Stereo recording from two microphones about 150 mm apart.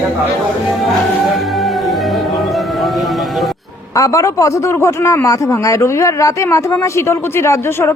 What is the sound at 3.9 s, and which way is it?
A man's voice, 20° left (ahead or behind).